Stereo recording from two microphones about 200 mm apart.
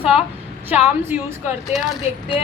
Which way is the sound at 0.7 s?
10° right (ahead or behind).